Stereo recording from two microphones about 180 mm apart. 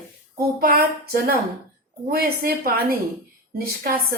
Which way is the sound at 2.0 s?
55° right (ahead or behind).